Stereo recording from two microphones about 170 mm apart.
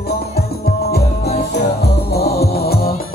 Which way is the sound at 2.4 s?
65° left (ahead or behind).